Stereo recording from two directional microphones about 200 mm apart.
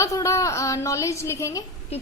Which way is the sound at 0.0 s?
15° left (ahead or behind).